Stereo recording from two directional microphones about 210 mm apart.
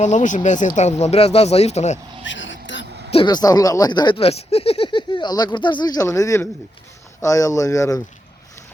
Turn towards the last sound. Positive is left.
turn(degrees=15)  # may be behind; listen again after turning